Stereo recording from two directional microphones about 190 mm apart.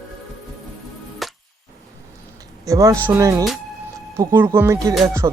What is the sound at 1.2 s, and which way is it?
Music, centre (ahead or behind).